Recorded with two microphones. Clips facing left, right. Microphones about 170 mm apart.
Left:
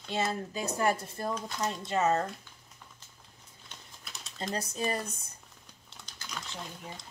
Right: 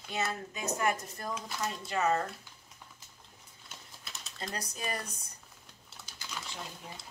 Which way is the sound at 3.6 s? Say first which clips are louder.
Even; centre (ahead or behind).